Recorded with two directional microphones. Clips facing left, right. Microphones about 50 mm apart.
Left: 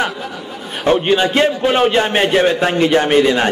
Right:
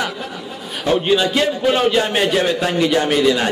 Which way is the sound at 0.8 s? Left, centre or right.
Left.